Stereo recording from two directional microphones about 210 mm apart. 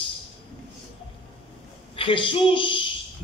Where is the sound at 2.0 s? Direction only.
25° left (ahead or behind).